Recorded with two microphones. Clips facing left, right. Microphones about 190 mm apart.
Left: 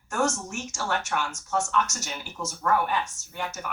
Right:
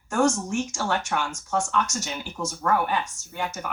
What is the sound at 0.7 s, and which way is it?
Speech, 15° right (ahead or behind).